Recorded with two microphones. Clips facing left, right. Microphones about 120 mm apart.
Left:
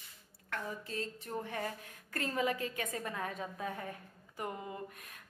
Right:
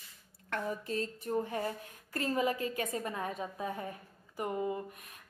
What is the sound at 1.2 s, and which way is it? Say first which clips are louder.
A woman's voice: right 7 dB; 25° right (ahead or behind).